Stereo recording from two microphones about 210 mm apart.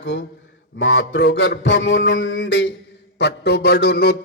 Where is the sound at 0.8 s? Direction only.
65° left (ahead or behind).